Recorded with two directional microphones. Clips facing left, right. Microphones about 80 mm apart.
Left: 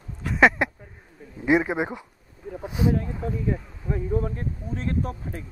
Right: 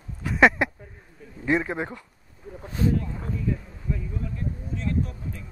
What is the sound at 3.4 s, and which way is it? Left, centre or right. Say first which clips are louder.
Speech: left 2 dB; left.